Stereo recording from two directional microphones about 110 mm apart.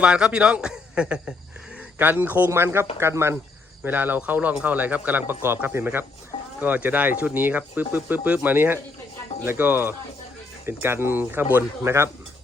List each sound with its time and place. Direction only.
0.0 s speech: 10° right (ahead or behind)